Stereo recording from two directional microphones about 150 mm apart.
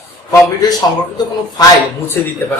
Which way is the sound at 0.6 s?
25° left (ahead or behind).